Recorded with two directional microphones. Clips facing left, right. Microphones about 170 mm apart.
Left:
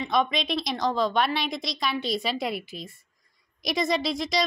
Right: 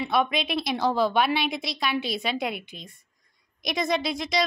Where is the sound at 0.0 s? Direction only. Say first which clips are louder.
Even; 5° right (ahead or behind).